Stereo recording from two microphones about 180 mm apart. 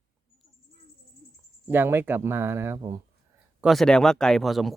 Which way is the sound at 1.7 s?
10° right (ahead or behind).